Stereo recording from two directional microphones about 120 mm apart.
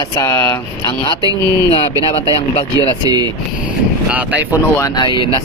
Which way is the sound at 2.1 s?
50° left (ahead or behind).